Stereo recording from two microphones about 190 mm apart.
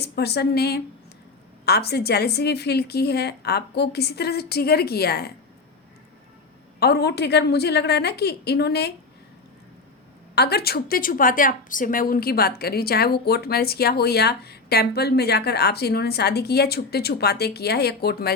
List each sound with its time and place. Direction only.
0.0 s a woman's voice: 60° left (ahead or behind)
6.7 s a woman's voice: 55° left (ahead or behind)
10.3 s a woman's voice: 55° left (ahead or behind)